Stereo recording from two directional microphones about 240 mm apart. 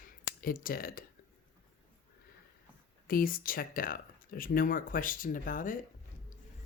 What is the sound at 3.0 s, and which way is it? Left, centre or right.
Speech, left.